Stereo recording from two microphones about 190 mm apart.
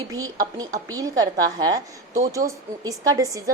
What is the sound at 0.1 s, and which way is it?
A woman's voice, 20° right (ahead or behind).